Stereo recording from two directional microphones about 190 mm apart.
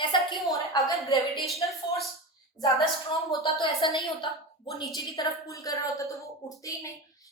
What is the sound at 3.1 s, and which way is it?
Speech, 25° left (ahead or behind).